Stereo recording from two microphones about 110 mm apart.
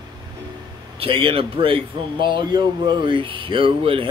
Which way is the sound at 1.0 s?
55° right (ahead or behind).